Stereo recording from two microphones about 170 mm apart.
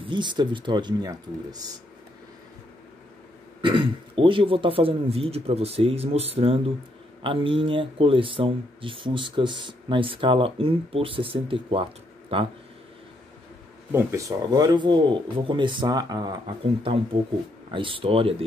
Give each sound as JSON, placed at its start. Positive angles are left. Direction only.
{"t": 0.0, "sound": "speech", "side_deg": -25}
{"t": 3.6, "sound": "speech", "side_deg": -30}
{"t": 13.9, "sound": "speech", "side_deg": -20}